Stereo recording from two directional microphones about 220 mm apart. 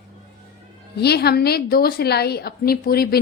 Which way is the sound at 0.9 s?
45° left (ahead or behind).